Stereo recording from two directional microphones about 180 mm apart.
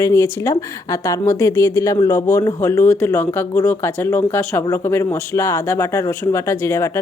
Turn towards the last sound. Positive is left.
turn(degrees=15)  # may be behind; listen again after turning